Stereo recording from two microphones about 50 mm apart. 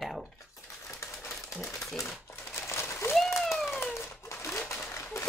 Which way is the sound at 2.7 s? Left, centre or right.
Left.